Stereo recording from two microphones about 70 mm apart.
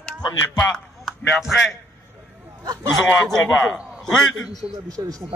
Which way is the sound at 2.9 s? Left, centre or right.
Centre.